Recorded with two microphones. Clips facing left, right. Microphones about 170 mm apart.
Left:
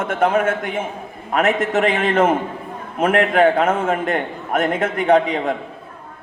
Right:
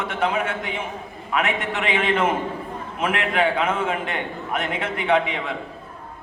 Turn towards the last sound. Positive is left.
turn(degrees=40)  # may be behind; listen again after turning